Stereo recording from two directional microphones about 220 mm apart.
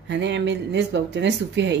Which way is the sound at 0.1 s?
55° right (ahead or behind).